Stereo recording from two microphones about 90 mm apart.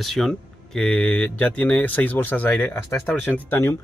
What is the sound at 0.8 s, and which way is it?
Speech, 15° left (ahead or behind).